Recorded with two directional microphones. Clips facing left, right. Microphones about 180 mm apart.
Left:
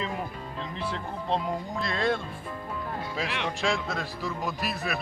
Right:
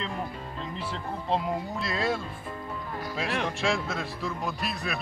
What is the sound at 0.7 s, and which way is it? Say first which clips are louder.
Speech: left 2 dB; centre (ahead or behind).